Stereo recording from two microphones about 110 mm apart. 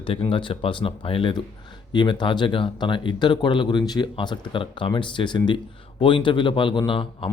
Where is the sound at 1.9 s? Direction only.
45° left (ahead or behind).